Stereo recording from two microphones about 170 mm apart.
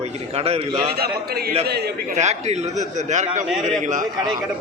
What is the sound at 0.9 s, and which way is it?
A man's voice, 65° right (ahead or behind).